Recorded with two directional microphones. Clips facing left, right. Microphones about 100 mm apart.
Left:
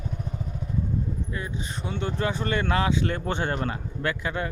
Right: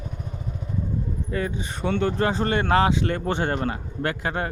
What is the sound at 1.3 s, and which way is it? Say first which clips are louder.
Speech: right 6 dB; 75° right (ahead or behind).